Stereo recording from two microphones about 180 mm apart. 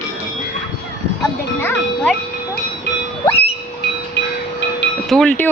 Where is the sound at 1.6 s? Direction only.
10° left (ahead or behind).